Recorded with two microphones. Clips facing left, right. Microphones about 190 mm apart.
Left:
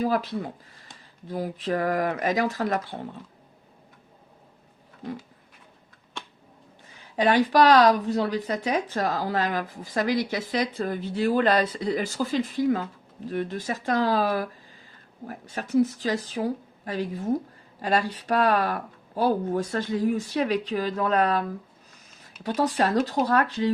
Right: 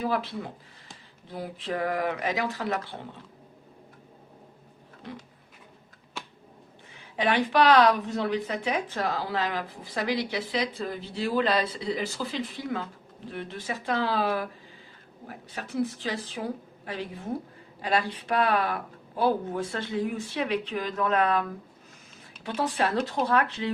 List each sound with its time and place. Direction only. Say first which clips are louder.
0.0 s speech: left 4 dB; 40° left (ahead or behind)
7.2 s speech: left 4 dB; 40° left (ahead or behind)
22.4 s speech: left 4 dB; 40° left (ahead or behind)